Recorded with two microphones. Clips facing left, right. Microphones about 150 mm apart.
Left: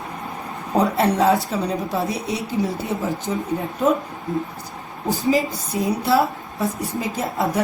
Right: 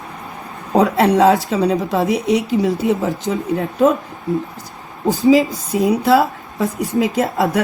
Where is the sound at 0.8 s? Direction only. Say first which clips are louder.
Right 5 dB; 90° right.